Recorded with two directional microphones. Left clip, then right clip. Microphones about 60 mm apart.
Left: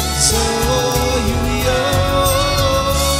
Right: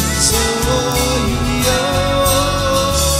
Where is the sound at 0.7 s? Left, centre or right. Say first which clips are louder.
Even; centre.